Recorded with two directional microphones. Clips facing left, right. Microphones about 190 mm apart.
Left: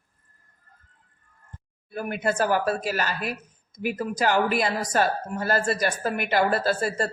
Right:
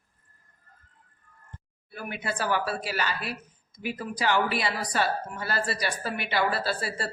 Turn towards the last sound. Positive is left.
turn(degrees=45)  # may be behind; listen again after turning